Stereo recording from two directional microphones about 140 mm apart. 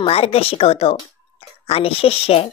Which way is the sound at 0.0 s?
45° left (ahead or behind).